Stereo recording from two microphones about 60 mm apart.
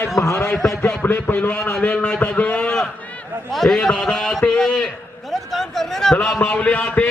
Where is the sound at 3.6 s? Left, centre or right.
Centre.